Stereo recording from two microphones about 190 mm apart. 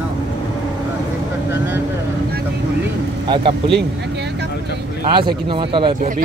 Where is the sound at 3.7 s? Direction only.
65° right (ahead or behind).